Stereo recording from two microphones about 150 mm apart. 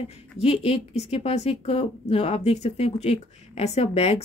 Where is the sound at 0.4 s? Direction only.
40° left (ahead or behind).